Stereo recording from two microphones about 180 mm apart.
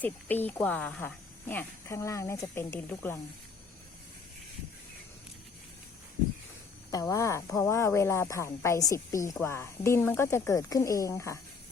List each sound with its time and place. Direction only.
0.0 s a woman's voice: 10° left (ahead or behind)
6.9 s a woman's voice: 20° left (ahead or behind)